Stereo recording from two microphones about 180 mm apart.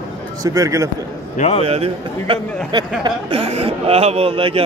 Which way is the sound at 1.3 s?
40° left (ahead or behind).